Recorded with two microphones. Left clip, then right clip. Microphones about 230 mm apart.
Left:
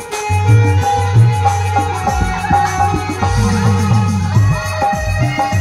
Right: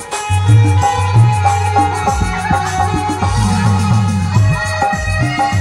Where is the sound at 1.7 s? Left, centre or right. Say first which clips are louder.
Right 2 dB; right.